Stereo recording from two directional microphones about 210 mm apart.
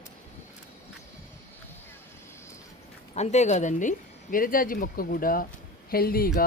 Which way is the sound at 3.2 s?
35° left (ahead or behind).